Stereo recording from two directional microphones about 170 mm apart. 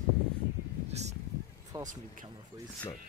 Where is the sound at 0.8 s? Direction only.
40° right (ahead or behind).